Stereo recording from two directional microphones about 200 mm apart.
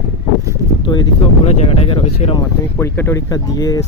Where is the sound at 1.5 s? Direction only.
30° left (ahead or behind).